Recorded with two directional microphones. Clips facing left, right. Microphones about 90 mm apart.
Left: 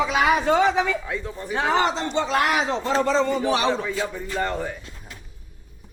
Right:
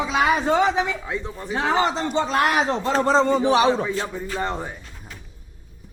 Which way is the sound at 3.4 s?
20° right (ahead or behind).